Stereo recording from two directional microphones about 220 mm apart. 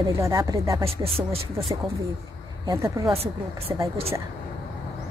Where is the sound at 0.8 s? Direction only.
25° right (ahead or behind).